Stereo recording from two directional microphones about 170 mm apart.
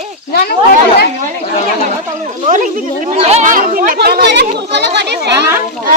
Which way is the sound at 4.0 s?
70° right (ahead or behind).